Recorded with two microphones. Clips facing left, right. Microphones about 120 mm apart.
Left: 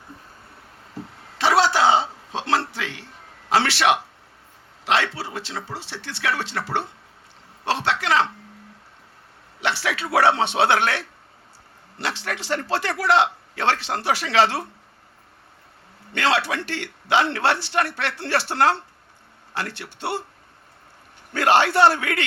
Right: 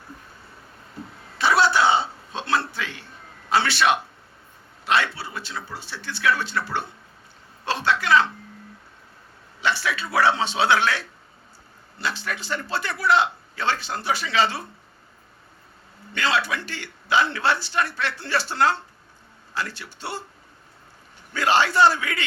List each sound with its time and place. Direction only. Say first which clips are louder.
0.9 s a sound: left 1 dB; 90° left
4.9 s a man's voice: left 1 dB; 90° left
9.6 s a man's voice: even; 75° left (ahead or behind); by 11.0 s 60° left (ahead or behind)
11.9 s speech: left 1 dB; 80° left
16.1 s a man's voice: left 2 dB; 70° left (ahead or behind)
21.3 s a man's voice: left 2 dB; 60° left (ahead or behind)